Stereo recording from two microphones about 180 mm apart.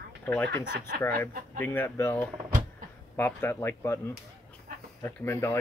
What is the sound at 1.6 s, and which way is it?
Speech, 10° left (ahead or behind).